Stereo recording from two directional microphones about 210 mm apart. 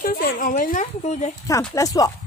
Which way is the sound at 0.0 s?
45° left (ahead or behind).